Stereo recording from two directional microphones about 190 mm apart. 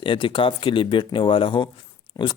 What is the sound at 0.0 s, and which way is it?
Speech, 25° left (ahead or behind).